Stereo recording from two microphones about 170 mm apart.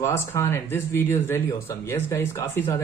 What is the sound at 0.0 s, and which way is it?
Speech, 15° left (ahead or behind).